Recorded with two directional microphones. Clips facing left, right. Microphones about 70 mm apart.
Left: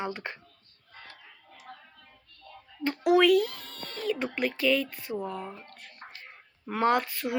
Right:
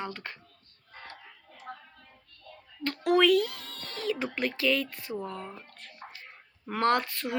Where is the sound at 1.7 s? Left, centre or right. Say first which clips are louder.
Right 4 dB; right.